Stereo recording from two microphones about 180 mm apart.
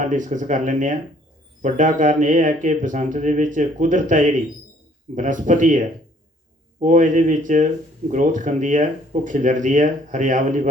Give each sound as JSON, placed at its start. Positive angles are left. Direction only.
{"t": 0.0, "sound": "speech", "side_deg": -45}